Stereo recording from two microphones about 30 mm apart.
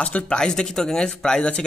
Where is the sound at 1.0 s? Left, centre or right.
Left.